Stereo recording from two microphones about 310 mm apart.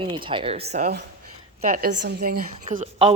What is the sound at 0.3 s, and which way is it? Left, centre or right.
A woman's voice, centre.